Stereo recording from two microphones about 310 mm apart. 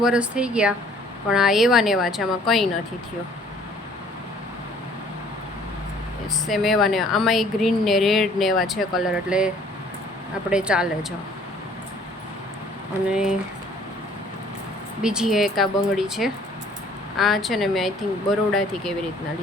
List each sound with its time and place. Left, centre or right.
0.0 s speech: centre
6.5 s speech: centre
10.5 s speech: centre
13.1 s speech: centre
15.0 s speech: centre